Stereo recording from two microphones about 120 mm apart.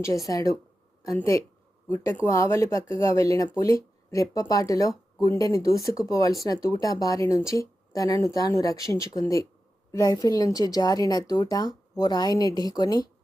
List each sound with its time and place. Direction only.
0.0 s a woman's voice: 25° left (ahead or behind)